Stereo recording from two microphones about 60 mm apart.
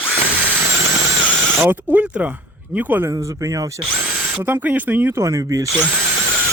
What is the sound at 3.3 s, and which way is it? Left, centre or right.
Speech, right.